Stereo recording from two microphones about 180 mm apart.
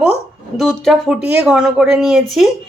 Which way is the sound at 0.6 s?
Centre (ahead or behind).